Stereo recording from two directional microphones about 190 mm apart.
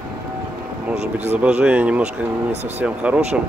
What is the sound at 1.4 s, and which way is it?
Speech, 5° right (ahead or behind).